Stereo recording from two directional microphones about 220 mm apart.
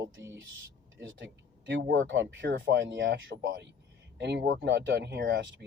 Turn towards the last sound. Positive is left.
turn(degrees=-55)  # may be behind; listen again after turning